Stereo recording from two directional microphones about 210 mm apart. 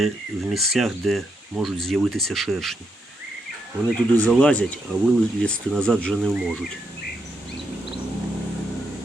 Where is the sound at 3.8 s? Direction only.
5° left (ahead or behind).